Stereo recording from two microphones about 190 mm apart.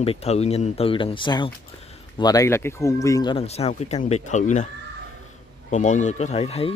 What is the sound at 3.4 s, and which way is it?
Speech, 35° left (ahead or behind).